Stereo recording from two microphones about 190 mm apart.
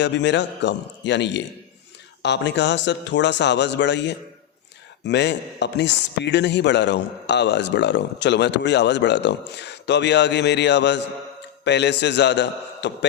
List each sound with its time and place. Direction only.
0.0 s a man's voice: 70° left (ahead or behind)